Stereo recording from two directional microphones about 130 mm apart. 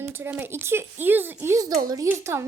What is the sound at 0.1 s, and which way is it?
Speech, 15° right (ahead or behind).